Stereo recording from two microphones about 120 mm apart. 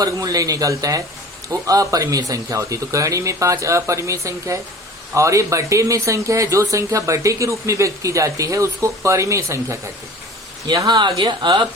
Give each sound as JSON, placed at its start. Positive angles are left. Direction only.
{"t": 0.0, "sound": "speech", "side_deg": -30}
{"t": 10.7, "sound": "speech", "side_deg": -35}